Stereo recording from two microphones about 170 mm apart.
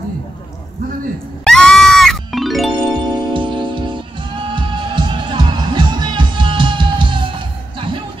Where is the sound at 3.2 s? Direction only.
30° right (ahead or behind).